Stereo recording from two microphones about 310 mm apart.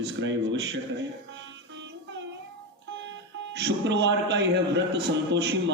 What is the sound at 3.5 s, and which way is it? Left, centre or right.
A man's voice, right.